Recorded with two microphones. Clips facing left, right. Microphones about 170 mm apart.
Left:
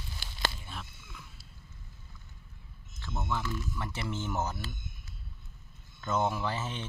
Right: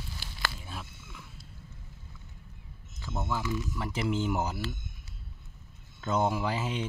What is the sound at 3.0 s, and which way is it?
Speech, 10° right (ahead or behind).